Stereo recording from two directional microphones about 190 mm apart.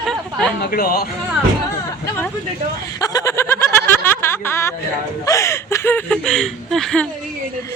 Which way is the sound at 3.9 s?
10° left (ahead or behind).